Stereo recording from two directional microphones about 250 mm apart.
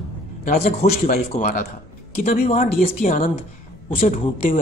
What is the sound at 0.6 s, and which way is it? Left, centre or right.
A man's voice, left.